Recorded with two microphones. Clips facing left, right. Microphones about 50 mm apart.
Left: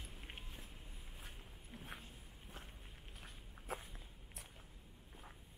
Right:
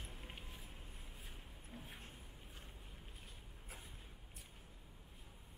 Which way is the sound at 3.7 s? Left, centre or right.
Left.